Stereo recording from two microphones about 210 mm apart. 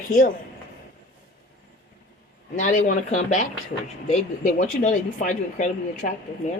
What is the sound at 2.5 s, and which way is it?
Speech, 35° left (ahead or behind).